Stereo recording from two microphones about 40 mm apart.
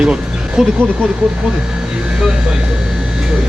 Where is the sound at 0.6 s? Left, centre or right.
Centre.